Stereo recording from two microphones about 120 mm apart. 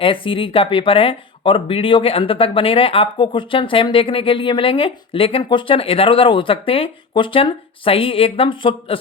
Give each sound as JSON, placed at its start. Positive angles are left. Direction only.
{"t": 0.0, "sound": "speech", "side_deg": 45}